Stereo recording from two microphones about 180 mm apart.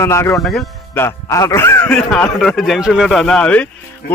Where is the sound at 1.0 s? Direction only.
15° left (ahead or behind).